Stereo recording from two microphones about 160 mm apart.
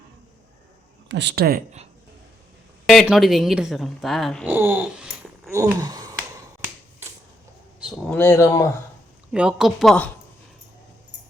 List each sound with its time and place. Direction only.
1.1 s speech: 90° right; by 1.6 s 70° right (ahead or behind)
2.8 s a woman's voice: centre (ahead or behind)
4.4 s speech: 10° right (ahead or behind)
5.5 s a sound: 15° right (ahead or behind)
7.9 s speech: 10° left (ahead or behind)
9.3 s a woman's voice: 5° right (ahead or behind)